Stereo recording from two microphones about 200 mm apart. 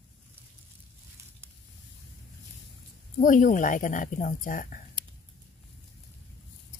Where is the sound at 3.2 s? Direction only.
40° left (ahead or behind).